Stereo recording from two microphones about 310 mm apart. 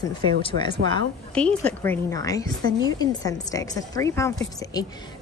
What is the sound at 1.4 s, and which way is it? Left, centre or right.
A woman's voice, centre.